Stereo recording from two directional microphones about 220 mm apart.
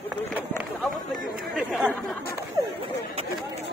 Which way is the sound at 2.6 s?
15° right (ahead or behind).